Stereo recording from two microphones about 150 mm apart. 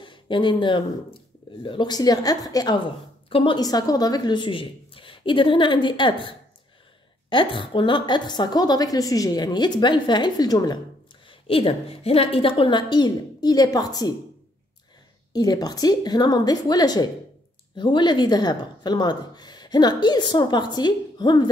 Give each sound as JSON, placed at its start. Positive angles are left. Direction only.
{"t": 0.0, "sound": "speech", "side_deg": 30}
{"t": 11.2, "sound": "speech", "side_deg": 40}
{"t": 15.3, "sound": "speech", "side_deg": 25}